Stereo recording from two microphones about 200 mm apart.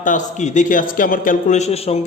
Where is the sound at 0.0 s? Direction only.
40° left (ahead or behind).